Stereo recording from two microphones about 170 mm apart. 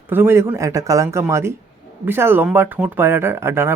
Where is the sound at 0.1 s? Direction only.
15° right (ahead or behind).